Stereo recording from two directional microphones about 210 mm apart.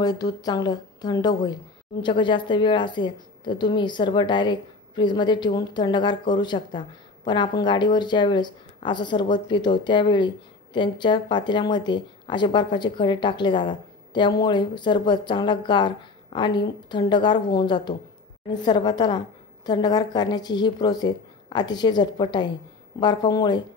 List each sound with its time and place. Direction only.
0.0 s speech: 20° left (ahead or behind)